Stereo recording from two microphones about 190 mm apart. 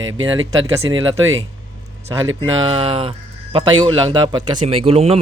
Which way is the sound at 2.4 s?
25° right (ahead or behind).